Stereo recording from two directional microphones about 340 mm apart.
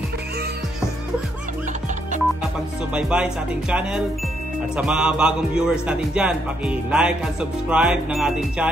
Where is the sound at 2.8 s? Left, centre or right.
Centre.